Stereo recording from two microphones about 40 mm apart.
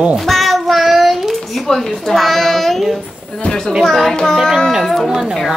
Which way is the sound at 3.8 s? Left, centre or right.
Centre.